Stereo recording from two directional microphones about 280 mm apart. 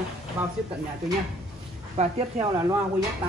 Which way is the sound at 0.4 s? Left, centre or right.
Centre.